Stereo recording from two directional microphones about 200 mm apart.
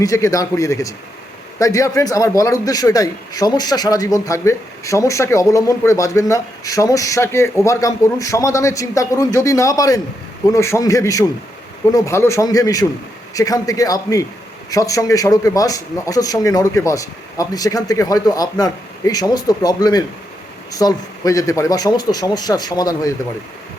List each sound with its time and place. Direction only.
0.0 s a man's voice: 15° left (ahead or behind)